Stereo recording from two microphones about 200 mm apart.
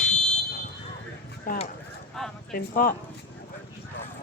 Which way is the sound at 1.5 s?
45° left (ahead or behind).